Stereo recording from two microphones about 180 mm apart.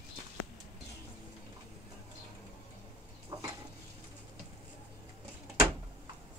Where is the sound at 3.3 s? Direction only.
20° right (ahead or behind).